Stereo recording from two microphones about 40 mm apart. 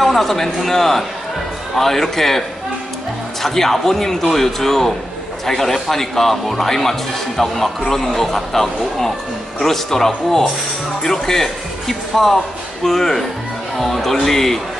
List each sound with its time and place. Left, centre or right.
0.0 s a man's voice: centre
3.4 s speech: centre